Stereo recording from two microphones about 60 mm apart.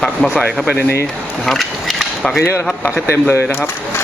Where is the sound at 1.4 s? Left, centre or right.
Centre.